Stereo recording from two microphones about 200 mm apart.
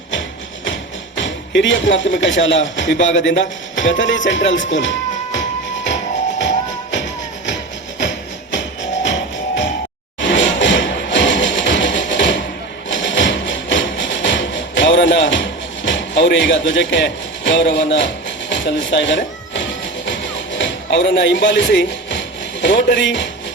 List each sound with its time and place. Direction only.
0.1 s music: 65° left (ahead or behind)
22.6 s speech: 65° left (ahead or behind)